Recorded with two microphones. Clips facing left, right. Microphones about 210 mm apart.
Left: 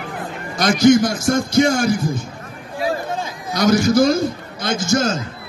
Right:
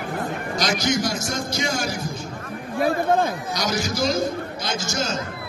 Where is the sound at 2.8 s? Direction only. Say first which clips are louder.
Right 3 dB; 55° right (ahead or behind).